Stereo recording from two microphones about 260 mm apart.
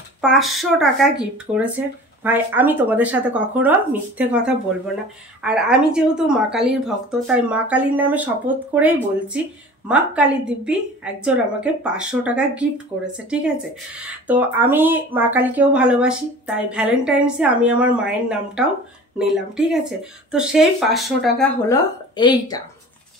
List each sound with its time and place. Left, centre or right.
0.2 s speech: centre
21.6 s a woman's voice: centre